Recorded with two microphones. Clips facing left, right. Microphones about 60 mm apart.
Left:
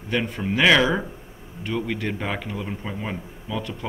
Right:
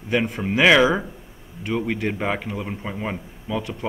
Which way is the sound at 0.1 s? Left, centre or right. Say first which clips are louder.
Right 3 dB; centre.